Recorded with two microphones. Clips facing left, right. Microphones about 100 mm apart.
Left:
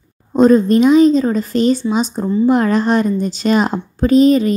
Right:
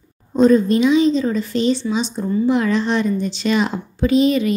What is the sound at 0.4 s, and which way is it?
A woman's voice, 45° left (ahead or behind).